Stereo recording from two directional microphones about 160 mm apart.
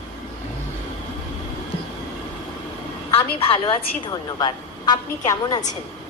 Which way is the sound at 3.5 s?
30° left (ahead or behind).